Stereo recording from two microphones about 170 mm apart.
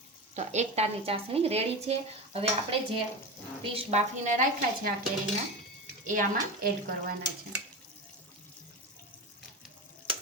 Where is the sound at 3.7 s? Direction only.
45° right (ahead or behind).